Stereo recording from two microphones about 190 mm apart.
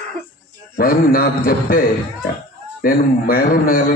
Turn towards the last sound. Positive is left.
turn(degrees=50)  # may be behind; listen again after turning